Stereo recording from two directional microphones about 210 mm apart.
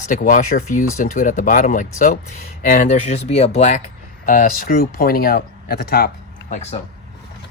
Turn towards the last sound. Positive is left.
turn(degrees=40)  # may be behind; listen again after turning